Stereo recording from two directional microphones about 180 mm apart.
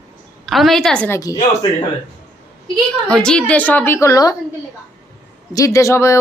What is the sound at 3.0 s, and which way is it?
A woman's voice, 5° left (ahead or behind).